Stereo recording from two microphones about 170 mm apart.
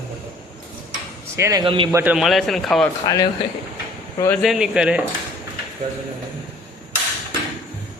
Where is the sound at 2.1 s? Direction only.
Centre (ahead or behind).